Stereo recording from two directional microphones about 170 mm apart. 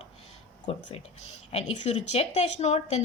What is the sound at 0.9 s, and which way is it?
Speech, 35° left (ahead or behind).